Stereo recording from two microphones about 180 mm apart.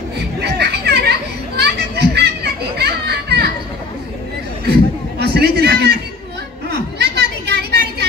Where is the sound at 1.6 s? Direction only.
65° right (ahead or behind).